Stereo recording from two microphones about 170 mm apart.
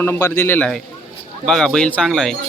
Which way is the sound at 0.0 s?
15° left (ahead or behind).